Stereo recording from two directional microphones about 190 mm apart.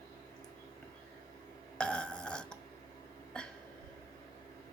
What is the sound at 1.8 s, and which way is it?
Burping, 5° left (ahead or behind).